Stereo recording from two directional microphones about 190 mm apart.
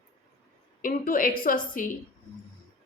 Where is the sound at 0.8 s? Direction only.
45° left (ahead or behind).